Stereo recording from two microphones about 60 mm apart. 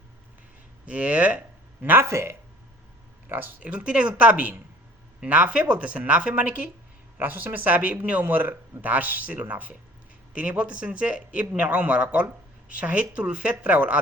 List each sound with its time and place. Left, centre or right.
0.9 s speech: right
1.8 s speech: right
2.0 s speech: right
3.2 s speech: right
3.7 s speech: centre
7.2 s speech: right